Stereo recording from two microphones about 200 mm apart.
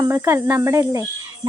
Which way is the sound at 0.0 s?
10° right (ahead or behind).